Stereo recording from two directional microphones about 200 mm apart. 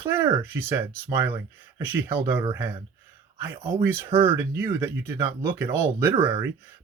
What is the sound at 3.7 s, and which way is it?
Speech, 10° right (ahead or behind).